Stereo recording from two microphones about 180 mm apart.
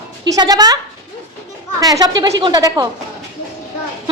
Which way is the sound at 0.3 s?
20° right (ahead or behind).